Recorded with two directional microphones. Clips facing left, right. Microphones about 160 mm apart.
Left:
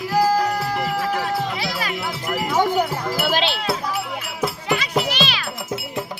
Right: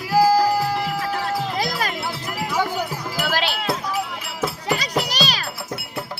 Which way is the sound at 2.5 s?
55° left (ahead or behind).